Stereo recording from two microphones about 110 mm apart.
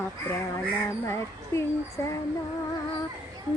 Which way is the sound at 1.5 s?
30° left (ahead or behind).